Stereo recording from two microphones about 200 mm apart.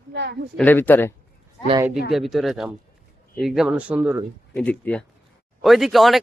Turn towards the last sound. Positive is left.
turn(degrees=0)  # may be behind; listen again after turning